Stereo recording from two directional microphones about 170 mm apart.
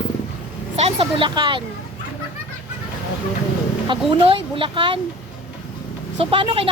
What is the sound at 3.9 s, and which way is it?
Speech, 30° right (ahead or behind).